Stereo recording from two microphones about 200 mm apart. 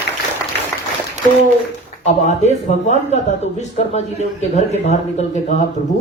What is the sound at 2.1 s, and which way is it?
A woman's voice, 35° left (ahead or behind).